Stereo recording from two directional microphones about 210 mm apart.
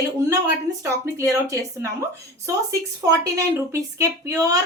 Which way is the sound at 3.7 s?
15° right (ahead or behind).